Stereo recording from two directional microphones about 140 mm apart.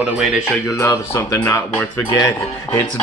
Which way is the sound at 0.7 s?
20° left (ahead or behind).